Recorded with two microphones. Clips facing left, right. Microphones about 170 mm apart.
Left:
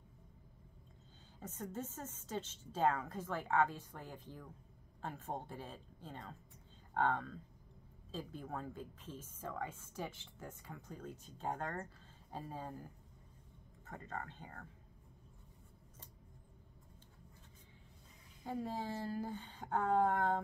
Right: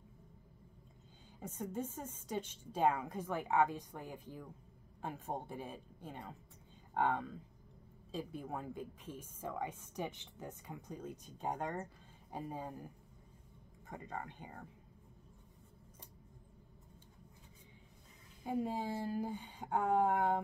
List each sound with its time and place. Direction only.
1.4 s speech: 10° right (ahead or behind)
18.4 s speech: 15° right (ahead or behind)